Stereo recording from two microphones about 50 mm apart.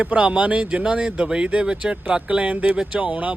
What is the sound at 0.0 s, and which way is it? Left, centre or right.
Speech, right.